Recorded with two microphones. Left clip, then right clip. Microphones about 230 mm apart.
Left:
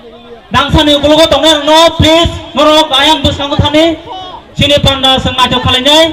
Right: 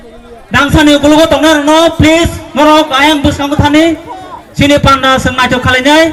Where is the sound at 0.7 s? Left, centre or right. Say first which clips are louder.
Right 1 dB; right.